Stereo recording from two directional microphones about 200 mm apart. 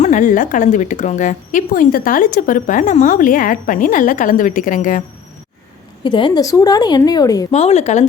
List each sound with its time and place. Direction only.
0.0 s a woman's voice: 40° left (ahead or behind)
6.0 s a woman's voice: 25° left (ahead or behind)
7.5 s a woman's voice: 30° left (ahead or behind)